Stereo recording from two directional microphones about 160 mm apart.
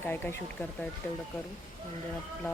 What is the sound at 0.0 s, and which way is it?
Speech, 15° left (ahead or behind).